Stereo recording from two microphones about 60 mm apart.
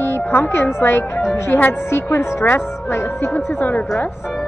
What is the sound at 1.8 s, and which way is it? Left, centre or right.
A woman's voice, left.